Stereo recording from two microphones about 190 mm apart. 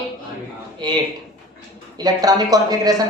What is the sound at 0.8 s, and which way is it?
Speech, 25° right (ahead or behind).